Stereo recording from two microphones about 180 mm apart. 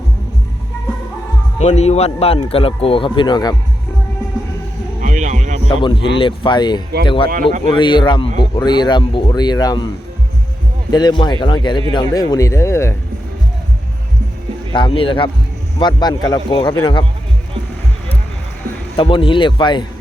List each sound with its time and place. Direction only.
1.5 s a man's voice: 35° left (ahead or behind)
4.9 s a sound: 45° right (ahead or behind)
5.6 s a man's voice: 30° left (ahead or behind)
10.9 s speech: 25° left (ahead or behind)
14.7 s speech: 30° left (ahead or behind)
18.9 s speech: 30° left (ahead or behind)